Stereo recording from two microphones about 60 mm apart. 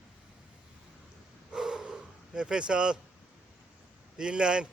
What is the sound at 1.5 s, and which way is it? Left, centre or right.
Dog, centre.